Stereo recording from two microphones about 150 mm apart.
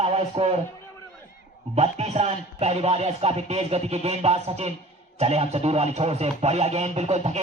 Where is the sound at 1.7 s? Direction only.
45° right (ahead or behind).